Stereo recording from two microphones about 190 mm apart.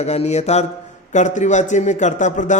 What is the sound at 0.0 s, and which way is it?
A man's voice, 35° left (ahead or behind).